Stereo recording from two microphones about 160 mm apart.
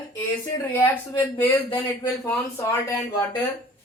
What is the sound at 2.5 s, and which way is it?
Speech, 20° left (ahead or behind).